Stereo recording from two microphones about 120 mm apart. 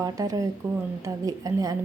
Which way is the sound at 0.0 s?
30° right (ahead or behind).